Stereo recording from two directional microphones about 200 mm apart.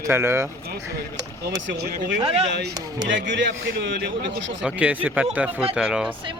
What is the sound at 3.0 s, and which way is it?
A man's voice, 65° right (ahead or behind).